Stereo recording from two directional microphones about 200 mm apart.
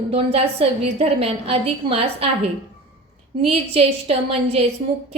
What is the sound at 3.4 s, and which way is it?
A woman's voice, 30° right (ahead or behind).